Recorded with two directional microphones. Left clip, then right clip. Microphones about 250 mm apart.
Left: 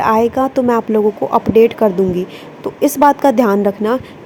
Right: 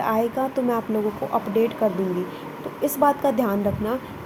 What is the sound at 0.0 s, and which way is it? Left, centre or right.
A woman's voice, left.